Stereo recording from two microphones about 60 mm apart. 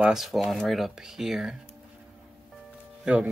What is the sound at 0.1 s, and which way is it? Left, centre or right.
Speech, centre.